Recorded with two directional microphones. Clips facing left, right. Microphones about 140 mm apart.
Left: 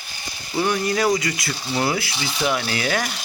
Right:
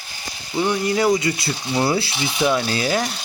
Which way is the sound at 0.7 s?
20° right (ahead or behind).